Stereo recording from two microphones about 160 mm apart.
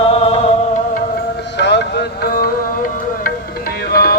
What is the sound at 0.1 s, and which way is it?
Music, 35° left (ahead or behind).